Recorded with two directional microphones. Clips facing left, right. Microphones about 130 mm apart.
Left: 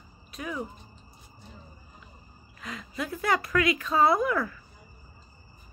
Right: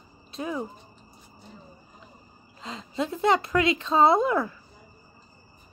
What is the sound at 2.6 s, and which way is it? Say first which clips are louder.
Speech: right 5 dB; 25° right (ahead or behind).